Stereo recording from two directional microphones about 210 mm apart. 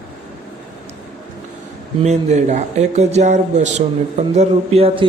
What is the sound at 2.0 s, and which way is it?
A man's voice, 30° right (ahead or behind).